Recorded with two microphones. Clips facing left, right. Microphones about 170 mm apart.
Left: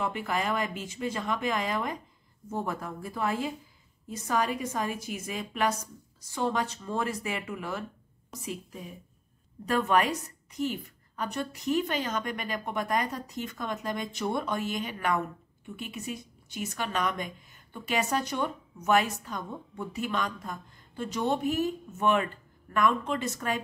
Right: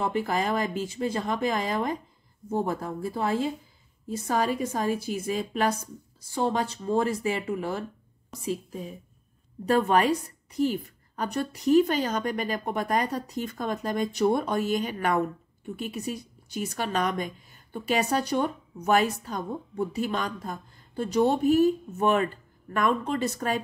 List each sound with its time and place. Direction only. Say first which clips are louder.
0.0 s a woman's voice: right 4 dB; 35° right (ahead or behind)
9.7 s a woman's voice: right 4 dB; 35° right (ahead or behind)